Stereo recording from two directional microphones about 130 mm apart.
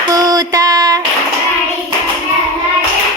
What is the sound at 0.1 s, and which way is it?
Female singing, 30° right (ahead or behind).